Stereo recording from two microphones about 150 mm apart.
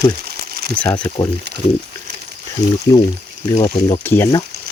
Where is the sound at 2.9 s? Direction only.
25° left (ahead or behind).